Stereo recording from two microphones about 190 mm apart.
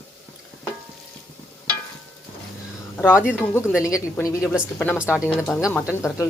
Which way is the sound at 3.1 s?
5° right (ahead or behind).